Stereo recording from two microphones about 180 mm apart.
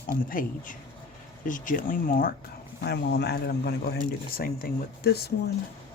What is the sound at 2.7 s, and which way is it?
Speech, 65° left (ahead or behind).